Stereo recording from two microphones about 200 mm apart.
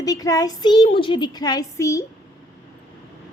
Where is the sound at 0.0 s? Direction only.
20° left (ahead or behind).